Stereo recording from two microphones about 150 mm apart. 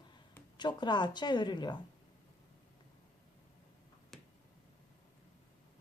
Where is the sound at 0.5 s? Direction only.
30° left (ahead or behind).